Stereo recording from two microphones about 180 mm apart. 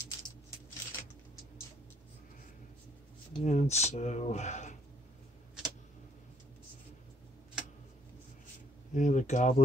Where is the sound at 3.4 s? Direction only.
40° left (ahead or behind).